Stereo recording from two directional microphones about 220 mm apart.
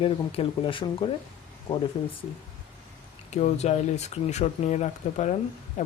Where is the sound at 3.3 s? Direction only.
30° left (ahead or behind).